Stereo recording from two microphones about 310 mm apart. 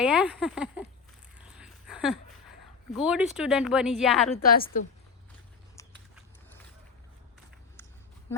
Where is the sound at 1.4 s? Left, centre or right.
Centre.